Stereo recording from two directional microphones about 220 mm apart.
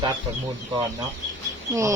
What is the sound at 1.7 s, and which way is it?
Speech, 15° right (ahead or behind).